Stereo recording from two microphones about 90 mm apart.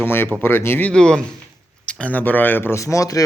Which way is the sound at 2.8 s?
40° left (ahead or behind).